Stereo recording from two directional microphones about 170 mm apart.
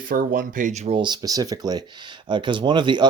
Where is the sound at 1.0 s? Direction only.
25° right (ahead or behind).